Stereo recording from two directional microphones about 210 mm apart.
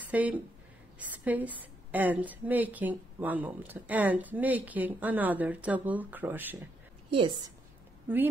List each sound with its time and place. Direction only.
0.1 s a woman's voice: 5° right (ahead or behind)
7.1 s a woman's voice: 25° right (ahead or behind)